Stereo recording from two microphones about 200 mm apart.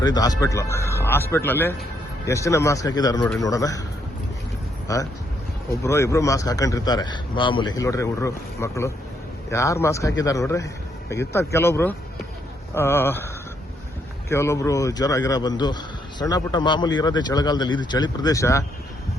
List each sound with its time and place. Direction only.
0.0 s a man's voice: 20° left (ahead or behind)
5.8 s a man's voice: 15° left (ahead or behind)